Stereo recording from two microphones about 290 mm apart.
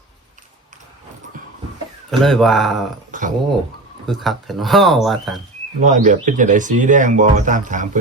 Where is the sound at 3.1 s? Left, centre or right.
Right.